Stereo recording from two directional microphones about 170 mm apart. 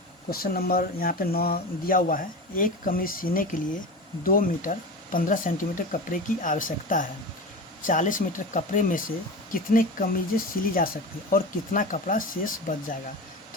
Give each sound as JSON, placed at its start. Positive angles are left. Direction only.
{"t": 0.3, "sound": "speech", "side_deg": 60}